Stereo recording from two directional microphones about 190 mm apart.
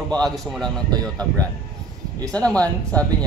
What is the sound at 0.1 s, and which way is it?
A man's voice, centre (ahead or behind).